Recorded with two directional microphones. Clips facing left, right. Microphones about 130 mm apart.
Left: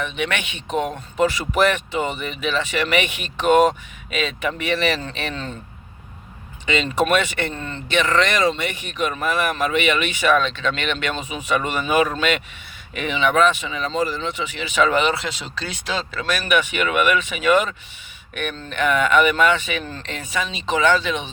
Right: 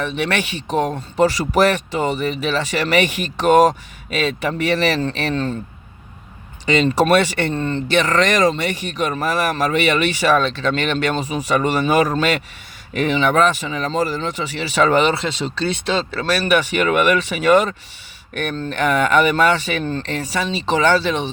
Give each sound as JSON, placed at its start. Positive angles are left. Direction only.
{"t": 0.0, "sound": "speech", "side_deg": -35}
{"t": 6.7, "sound": "speech", "side_deg": -40}